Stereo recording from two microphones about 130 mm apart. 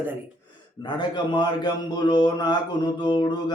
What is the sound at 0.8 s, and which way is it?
Mantra, 35° left (ahead or behind).